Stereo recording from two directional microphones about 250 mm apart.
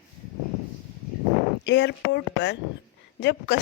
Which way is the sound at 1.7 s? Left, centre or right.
Left.